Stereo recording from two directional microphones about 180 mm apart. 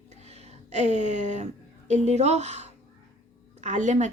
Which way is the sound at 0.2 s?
35° right (ahead or behind).